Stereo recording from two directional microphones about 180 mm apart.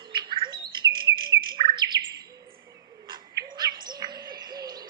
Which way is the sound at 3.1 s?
25° right (ahead or behind).